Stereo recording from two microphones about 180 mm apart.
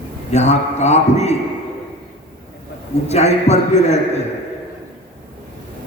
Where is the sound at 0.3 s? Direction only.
40° left (ahead or behind).